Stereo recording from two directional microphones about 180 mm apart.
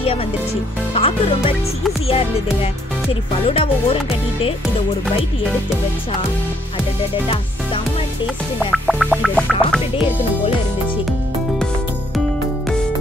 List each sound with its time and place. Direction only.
0.9 s speech: 30° left (ahead or behind)
8.5 s music: 5° right (ahead or behind)